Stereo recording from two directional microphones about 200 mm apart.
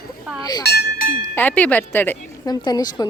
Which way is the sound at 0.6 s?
55° left (ahead or behind).